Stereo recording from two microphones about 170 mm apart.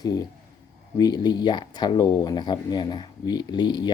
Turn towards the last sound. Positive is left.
turn(degrees=25)  # may be behind; listen again after turning